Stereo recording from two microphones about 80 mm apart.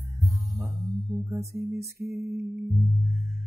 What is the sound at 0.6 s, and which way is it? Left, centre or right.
Music, right.